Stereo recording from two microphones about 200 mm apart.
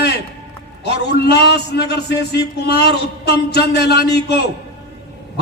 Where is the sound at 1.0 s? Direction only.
55° left (ahead or behind).